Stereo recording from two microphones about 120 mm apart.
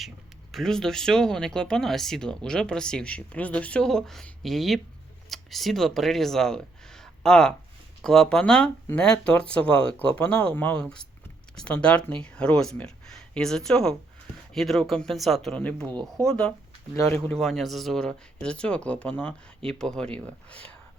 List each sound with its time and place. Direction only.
0.5 s speech: 5° left (ahead or behind)
15.9 s speech: 35° right (ahead or behind)
16.2 s speech: 10° left (ahead or behind)